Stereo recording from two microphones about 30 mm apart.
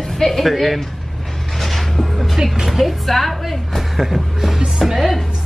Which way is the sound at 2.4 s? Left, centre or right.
Right.